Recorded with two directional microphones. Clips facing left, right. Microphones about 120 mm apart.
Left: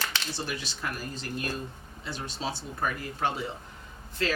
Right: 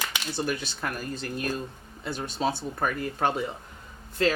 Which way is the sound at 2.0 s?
50° right (ahead or behind).